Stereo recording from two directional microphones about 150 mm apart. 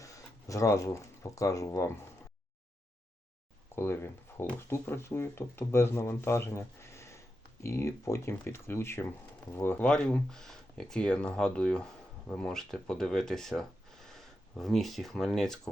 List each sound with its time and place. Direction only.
0.0 s speech: 20° left (ahead or behind)
3.8 s speech: 15° left (ahead or behind)